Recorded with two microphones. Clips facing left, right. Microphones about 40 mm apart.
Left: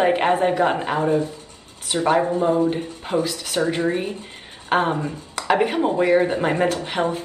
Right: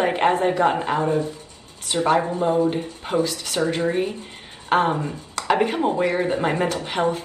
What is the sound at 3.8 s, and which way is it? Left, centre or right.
Speech, left.